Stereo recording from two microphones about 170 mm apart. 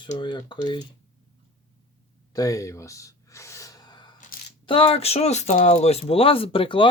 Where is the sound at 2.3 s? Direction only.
20° left (ahead or behind).